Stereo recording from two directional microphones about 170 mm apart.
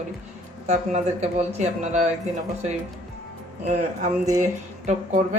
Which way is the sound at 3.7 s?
45° right (ahead or behind).